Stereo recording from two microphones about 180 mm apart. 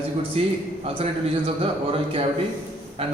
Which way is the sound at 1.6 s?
35° right (ahead or behind).